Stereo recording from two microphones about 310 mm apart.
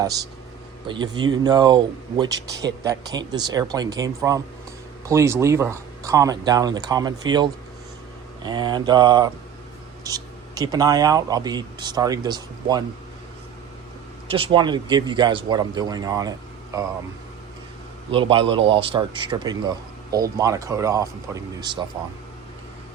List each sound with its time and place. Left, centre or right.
0.0 s speech: centre
14.3 s speech: centre
18.1 s speech: centre